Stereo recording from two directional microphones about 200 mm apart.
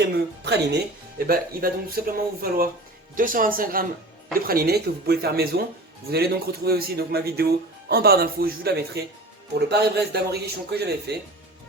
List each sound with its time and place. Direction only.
0.4 s speech: 55° right (ahead or behind)